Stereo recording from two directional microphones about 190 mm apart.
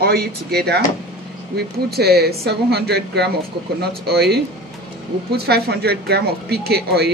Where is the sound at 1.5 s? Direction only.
55° right (ahead or behind).